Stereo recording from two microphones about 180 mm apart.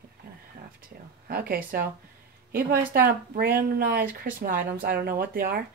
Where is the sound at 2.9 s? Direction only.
55° right (ahead or behind).